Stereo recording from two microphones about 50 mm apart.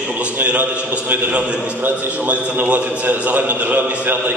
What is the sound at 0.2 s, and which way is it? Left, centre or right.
A man's voice, right.